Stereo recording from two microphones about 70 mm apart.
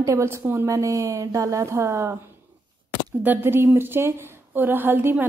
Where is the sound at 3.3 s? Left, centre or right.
Right.